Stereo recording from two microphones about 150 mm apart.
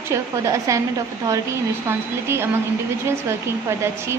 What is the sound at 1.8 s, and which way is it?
Speech, 15° right (ahead or behind).